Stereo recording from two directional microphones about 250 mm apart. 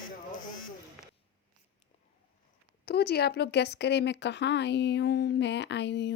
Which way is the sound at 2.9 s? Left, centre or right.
Left.